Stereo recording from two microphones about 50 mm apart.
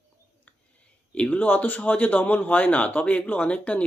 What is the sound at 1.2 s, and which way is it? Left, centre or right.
A man's voice, left.